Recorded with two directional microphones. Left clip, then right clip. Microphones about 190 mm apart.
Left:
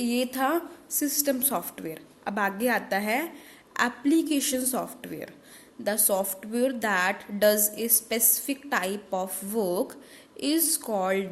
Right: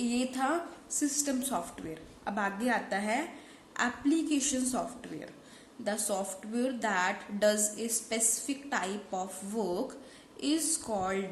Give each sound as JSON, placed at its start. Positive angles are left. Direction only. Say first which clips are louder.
{"t": 0.0, "sound": "a woman's voice", "louder": "left 5 dB", "side_deg": 45}